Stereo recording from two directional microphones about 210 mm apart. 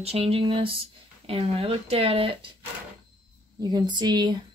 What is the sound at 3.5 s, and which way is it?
Speech, 20° right (ahead or behind).